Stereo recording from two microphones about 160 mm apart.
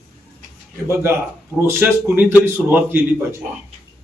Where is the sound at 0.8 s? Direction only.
15° right (ahead or behind).